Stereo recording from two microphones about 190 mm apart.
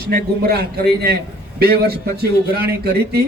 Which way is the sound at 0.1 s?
55° right (ahead or behind).